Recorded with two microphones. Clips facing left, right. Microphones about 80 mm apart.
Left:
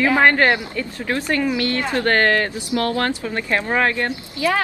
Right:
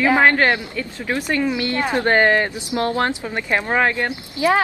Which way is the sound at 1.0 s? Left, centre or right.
Centre.